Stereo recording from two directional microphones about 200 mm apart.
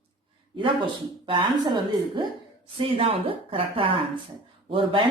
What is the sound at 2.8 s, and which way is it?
Speech, 30° right (ahead or behind).